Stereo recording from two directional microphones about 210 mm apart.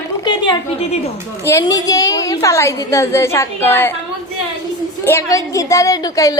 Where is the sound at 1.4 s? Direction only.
15° left (ahead or behind).